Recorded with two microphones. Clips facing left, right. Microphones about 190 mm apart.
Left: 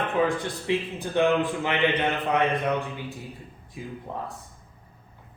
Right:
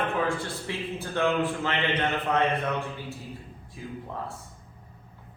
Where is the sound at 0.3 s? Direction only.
15° left (ahead or behind).